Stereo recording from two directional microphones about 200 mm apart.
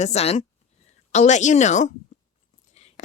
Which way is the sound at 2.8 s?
35° left (ahead or behind).